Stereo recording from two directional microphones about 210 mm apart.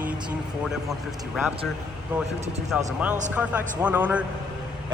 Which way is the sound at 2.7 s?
5° right (ahead or behind).